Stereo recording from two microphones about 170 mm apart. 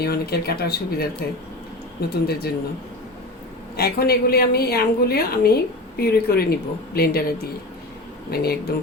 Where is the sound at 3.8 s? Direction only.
65° left (ahead or behind).